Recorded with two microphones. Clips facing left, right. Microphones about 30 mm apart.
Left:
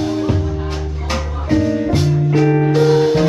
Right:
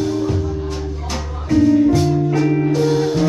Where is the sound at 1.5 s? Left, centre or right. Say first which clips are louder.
Right 3 dB; left.